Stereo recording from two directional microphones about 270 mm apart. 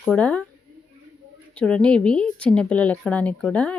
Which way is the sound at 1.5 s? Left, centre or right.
Centre.